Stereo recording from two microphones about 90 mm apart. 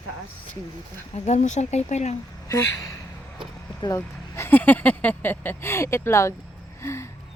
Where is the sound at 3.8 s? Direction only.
30° left (ahead or behind).